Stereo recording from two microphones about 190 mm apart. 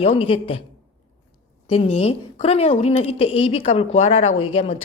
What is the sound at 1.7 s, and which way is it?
A woman's voice, 35° left (ahead or behind).